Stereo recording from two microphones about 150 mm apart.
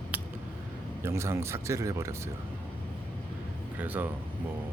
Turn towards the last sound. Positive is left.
turn(degrees=-10)  # may be behind; listen again after turning